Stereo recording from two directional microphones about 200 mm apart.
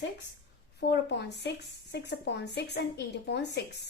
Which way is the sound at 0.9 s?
55° left (ahead or behind).